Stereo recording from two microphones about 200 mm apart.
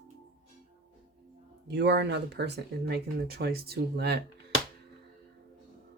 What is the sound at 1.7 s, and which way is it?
Speech, 55° right (ahead or behind).